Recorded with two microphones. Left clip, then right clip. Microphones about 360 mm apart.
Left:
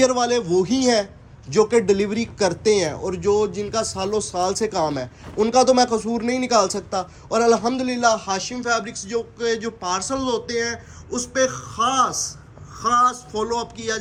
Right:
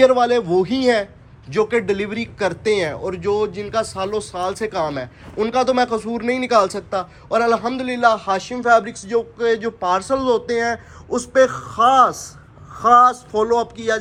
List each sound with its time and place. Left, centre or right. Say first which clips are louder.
0.0 s a man's voice: right 5 dB; centre